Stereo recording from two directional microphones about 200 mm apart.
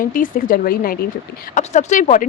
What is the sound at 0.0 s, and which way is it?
Speech, 45° left (ahead or behind).